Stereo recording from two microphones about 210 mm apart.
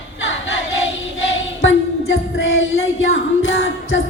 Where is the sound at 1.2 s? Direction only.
65° left (ahead or behind).